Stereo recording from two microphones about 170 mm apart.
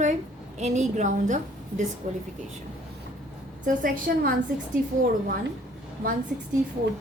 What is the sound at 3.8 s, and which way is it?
Speech, 55° right (ahead or behind).